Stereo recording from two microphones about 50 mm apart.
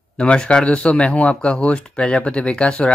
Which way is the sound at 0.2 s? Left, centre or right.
Centre.